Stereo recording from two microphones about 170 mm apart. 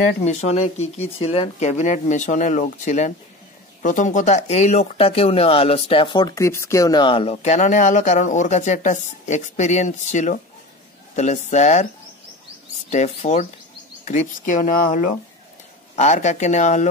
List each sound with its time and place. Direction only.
0.2 s speech: 40° left (ahead or behind)
12.9 s speech: 45° left (ahead or behind)